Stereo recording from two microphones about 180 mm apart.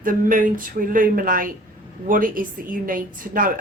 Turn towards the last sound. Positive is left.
turn(degrees=-50)  # may be behind; listen again after turning